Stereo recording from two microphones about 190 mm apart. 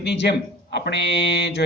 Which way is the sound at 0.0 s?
65° left (ahead or behind).